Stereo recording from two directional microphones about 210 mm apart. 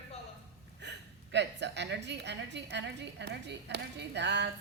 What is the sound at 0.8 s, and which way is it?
A woman's voice, 55° right (ahead or behind).